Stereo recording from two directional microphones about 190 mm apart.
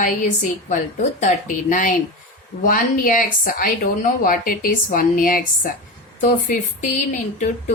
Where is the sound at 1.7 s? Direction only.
45° left (ahead or behind).